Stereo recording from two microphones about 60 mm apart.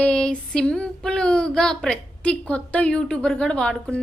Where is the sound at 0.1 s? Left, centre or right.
Centre.